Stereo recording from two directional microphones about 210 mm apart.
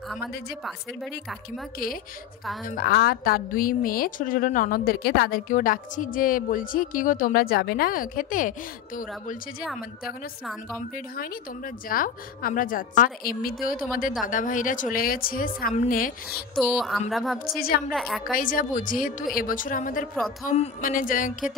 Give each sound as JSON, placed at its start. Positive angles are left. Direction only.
{"t": 2.7, "sound": "a woman's voice", "side_deg": 50}
{"t": 10.4, "sound": "speech", "side_deg": 0}
{"t": 11.1, "sound": "a woman's voice", "side_deg": 40}
{"t": 16.5, "sound": "speech", "side_deg": 0}
{"t": 18.3, "sound": "a woman's voice", "side_deg": 40}